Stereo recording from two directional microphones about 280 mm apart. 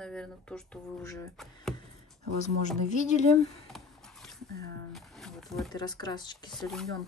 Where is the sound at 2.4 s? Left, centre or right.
Left.